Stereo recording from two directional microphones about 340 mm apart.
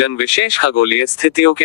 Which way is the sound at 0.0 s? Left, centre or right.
Left.